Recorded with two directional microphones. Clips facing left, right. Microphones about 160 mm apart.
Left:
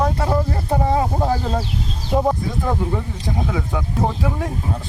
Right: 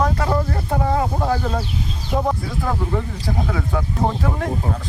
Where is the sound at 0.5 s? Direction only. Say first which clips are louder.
Left 1 dB; 15° left (ahead or behind).